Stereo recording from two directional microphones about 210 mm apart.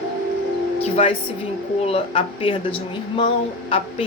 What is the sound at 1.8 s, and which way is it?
A woman's voice, 25° left (ahead or behind).